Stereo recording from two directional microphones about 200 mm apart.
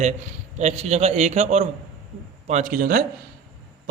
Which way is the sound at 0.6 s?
35° right (ahead or behind).